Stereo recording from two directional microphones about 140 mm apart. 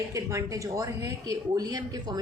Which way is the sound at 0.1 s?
25° right (ahead or behind).